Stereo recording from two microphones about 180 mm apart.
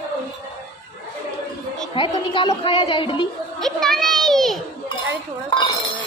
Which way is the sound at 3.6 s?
Centre (ahead or behind).